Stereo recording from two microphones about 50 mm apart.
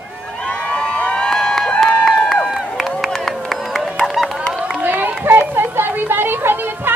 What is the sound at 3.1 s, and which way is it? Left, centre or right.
Run, centre.